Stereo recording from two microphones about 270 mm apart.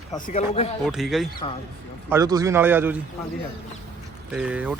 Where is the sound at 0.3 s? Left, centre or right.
Left.